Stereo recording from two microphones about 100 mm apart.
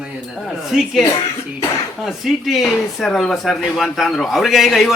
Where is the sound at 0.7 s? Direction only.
5° right (ahead or behind).